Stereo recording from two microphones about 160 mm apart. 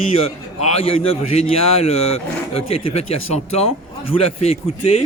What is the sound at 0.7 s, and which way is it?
Speech, 35° left (ahead or behind).